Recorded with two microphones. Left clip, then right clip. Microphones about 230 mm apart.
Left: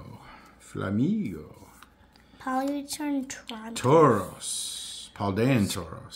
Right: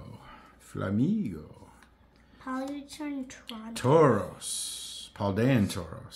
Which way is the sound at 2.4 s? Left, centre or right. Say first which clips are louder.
Left 7 dB; left.